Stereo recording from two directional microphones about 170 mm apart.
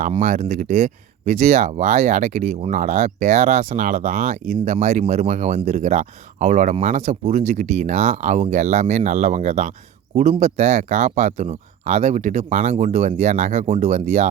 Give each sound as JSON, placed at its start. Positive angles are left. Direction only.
{"t": 0.2, "sound": "speech", "side_deg": -45}